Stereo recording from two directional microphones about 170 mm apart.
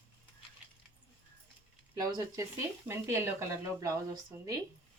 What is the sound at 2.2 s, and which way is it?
Speech, 15° right (ahead or behind).